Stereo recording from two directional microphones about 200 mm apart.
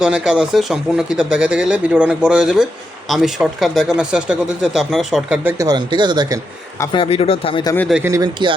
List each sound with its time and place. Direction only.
0.0 s speech: 5° right (ahead or behind); by 6.4 s 20° right (ahead or behind)
6.9 s speech: 30° left (ahead or behind)
7.8 s speech: centre (ahead or behind)
8.0 s speech: 20° right (ahead or behind)